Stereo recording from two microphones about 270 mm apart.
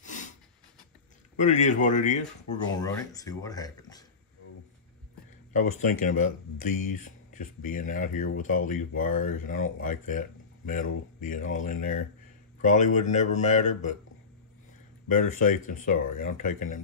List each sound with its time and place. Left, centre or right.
0.0 s a sound: left
1.4 s speech: left
2.8 s speech: centre
5.5 s speech: left
15.2 s speech: left